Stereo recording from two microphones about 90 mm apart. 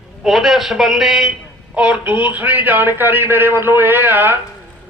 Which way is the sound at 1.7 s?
15° right (ahead or behind).